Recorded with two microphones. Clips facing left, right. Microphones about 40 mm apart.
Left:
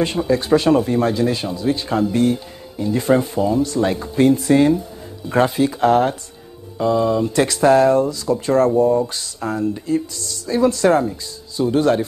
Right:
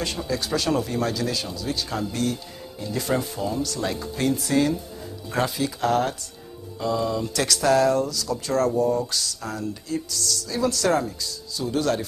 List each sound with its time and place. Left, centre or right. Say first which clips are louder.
0.0 s speech: left 9 dB; left